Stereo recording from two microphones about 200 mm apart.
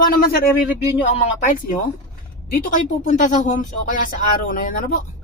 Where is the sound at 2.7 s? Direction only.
40° left (ahead or behind).